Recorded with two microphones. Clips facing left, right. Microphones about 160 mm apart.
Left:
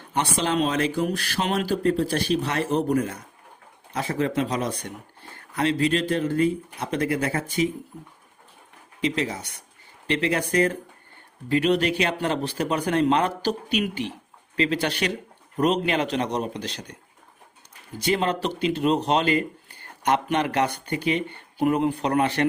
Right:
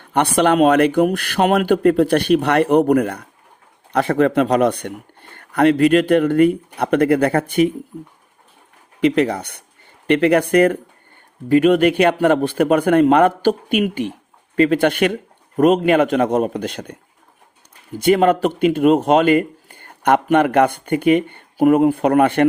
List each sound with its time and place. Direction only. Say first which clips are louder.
0.1 s speech: right 9 dB; 60° right (ahead or behind)
9.0 s speech: right 10 dB; 60° right (ahead or behind)
11.4 s speech: right 8 dB; 50° right (ahead or behind)
18.0 s speech: right 10 dB; 55° right (ahead or behind)